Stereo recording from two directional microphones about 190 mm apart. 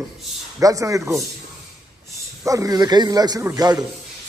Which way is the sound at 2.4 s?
15° right (ahead or behind).